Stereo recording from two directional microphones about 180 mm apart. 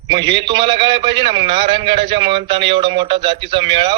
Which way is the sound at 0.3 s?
25° right (ahead or behind).